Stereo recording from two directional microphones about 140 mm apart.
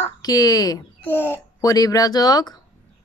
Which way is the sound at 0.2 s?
25° left (ahead or behind).